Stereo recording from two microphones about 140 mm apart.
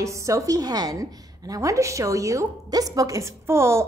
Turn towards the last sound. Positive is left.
turn(degrees=-20)  # may be behind; listen again after turning